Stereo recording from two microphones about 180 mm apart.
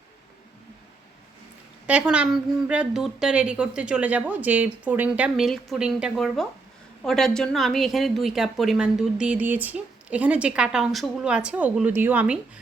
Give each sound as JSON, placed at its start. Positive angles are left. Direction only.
{"t": 1.9, "sound": "a woman's voice", "side_deg": -5}